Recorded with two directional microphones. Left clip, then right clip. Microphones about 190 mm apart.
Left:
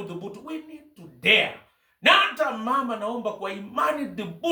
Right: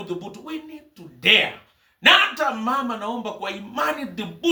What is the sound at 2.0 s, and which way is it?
Speech, 15° left (ahead or behind).